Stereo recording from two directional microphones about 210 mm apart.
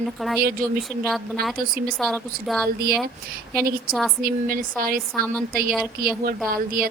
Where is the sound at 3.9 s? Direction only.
45° right (ahead or behind).